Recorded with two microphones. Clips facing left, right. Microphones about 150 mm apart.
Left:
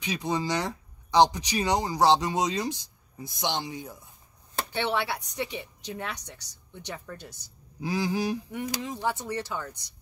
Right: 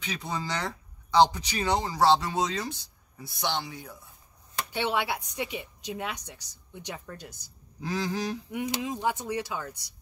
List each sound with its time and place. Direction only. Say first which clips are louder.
0.0 s speech: left 5 dB; 15° left (ahead or behind)
4.7 s a woman's voice: even; 15° right (ahead or behind)
7.8 s speech: left 3 dB; 10° left (ahead or behind)
8.5 s a woman's voice: right 2 dB; 10° right (ahead or behind)